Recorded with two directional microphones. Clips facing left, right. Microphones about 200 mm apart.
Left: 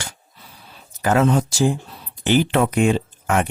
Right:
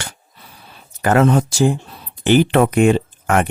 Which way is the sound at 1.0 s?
60° right (ahead or behind).